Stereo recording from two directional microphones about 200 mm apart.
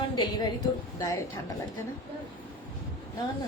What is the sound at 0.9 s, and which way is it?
Speech, 15° left (ahead or behind).